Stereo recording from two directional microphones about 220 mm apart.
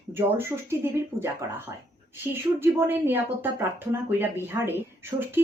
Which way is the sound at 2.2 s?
10° right (ahead or behind).